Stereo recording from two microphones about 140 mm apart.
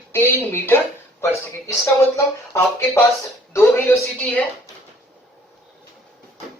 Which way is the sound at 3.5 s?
15° left (ahead or behind).